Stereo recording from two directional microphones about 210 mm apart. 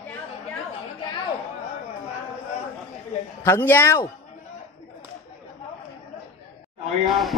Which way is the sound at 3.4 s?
10° left (ahead or behind).